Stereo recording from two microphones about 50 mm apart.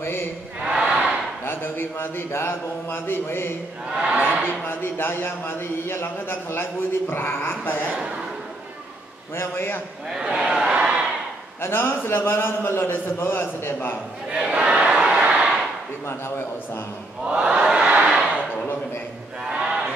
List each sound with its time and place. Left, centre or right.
0.0 s speech: left
0.6 s battle cry: right
1.4 s a man's voice: left
3.9 s a sound: centre
4.5 s a man's voice: left
9.3 s a man's voice: left
10.0 s a man's voice: centre
10.7 s crowd: centre
11.6 s a man's voice: left
14.5 s crowd: right
17.2 s crowd: centre
18.0 s a sound: centre
19.5 s a sound: centre